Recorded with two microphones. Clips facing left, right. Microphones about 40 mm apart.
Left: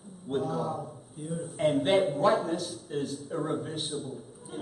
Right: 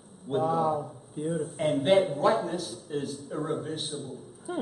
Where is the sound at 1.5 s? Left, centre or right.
Centre.